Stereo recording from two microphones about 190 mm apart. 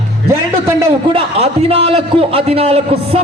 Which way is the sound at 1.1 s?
30° right (ahead or behind).